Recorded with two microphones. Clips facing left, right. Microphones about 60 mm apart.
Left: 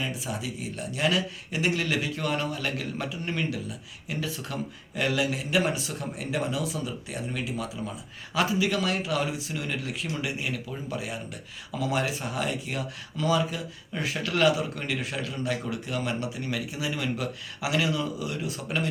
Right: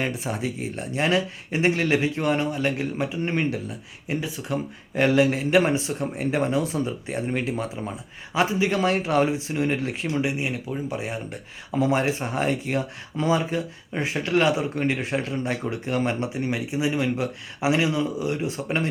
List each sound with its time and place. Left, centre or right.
0.0 s speech: right
4.2 s speech: right
4.9 s speech: right